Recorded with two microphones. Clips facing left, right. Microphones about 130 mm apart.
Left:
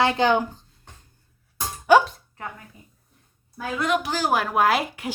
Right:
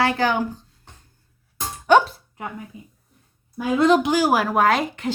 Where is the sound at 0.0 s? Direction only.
20° left (ahead or behind).